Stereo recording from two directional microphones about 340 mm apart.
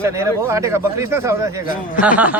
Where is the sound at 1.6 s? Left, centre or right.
Left.